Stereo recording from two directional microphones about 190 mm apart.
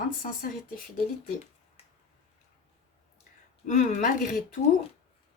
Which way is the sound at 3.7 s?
40° left (ahead or behind).